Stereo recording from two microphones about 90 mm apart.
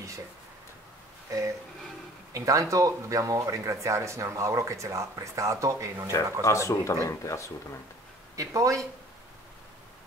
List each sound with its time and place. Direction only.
2.3 s speech: 40° right (ahead or behind)
6.4 s speech: 35° left (ahead or behind)
8.4 s speech: 35° right (ahead or behind)